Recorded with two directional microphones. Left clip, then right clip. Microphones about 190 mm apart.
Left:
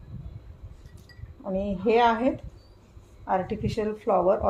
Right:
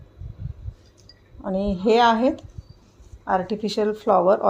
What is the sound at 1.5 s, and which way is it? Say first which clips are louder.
A woman's voice: right 4 dB; 50° right (ahead or behind).